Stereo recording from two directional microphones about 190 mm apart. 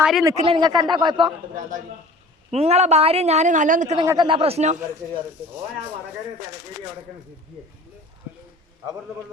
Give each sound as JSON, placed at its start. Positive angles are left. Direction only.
{"t": 0.0, "sound": "speech", "side_deg": 0}
{"t": 0.3, "sound": "a man's voice", "side_deg": -30}
{"t": 2.5, "sound": "a woman's voice", "side_deg": -35}
{"t": 3.9, "sound": "a man's voice", "side_deg": -20}
{"t": 4.3, "sound": "a woman's voice", "side_deg": -30}